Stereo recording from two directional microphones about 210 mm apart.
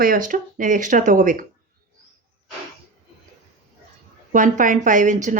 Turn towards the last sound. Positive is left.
turn(degrees=-35)  # may be behind; listen again after turning